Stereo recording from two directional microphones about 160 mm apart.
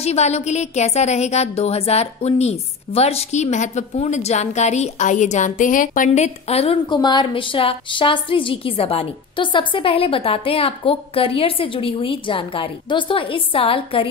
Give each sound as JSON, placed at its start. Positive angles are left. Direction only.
{"t": 0.0, "sound": "a woman's voice", "side_deg": 40}